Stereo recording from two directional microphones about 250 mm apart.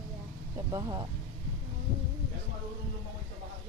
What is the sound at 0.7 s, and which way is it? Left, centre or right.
Speech, centre.